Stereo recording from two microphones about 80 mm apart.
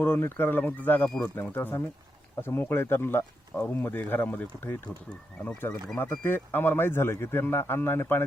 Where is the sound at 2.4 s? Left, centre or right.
Left.